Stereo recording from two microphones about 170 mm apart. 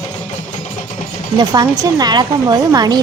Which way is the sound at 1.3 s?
25° right (ahead or behind).